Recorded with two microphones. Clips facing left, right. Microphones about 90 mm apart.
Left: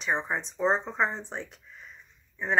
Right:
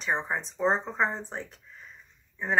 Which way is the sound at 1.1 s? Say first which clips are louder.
Right 1 dB; 40° right (ahead or behind).